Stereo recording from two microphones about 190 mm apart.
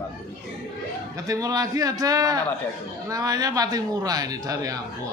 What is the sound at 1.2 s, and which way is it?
A man's voice, 20° right (ahead or behind).